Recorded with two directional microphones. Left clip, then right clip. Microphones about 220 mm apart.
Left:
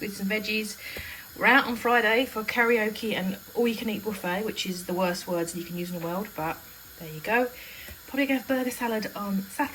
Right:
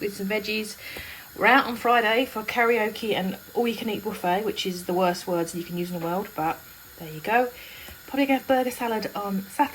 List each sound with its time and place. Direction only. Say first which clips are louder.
0.0 s speech: right 2 dB; 10° right (ahead or behind)